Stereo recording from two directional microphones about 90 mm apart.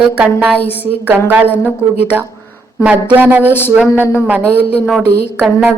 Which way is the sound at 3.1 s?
20° right (ahead or behind).